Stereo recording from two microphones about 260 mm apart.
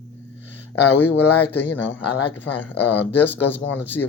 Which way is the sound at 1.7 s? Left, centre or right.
Left.